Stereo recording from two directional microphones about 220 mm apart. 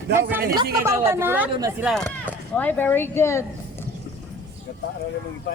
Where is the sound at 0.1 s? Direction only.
10° right (ahead or behind).